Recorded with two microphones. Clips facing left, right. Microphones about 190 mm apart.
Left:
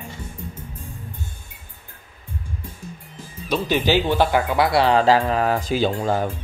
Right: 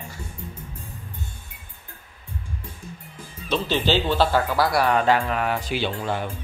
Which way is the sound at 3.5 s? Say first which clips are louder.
Left 2 dB; 15° left (ahead or behind).